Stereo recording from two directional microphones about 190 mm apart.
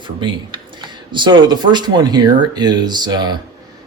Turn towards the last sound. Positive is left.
turn(degrees=-20)  # may be behind; listen again after turning